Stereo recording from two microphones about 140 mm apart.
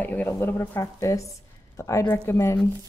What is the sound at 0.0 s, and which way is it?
Speech, 10° left (ahead or behind).